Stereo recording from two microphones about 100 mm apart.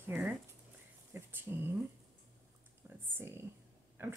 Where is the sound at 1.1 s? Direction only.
20° right (ahead or behind).